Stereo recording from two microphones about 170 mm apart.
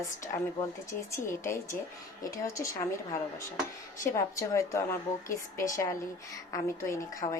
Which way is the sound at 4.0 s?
20° left (ahead or behind).